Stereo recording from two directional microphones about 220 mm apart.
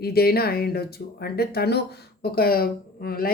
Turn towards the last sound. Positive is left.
turn(degrees=45)  # may be behind; listen again after turning